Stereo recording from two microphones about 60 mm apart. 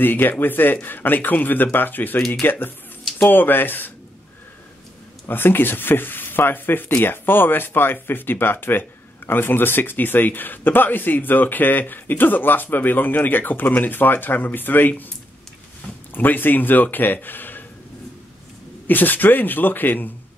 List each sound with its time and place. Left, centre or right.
0.0 s speech: left
5.3 s speech: left
16.1 s speech: left
18.9 s speech: left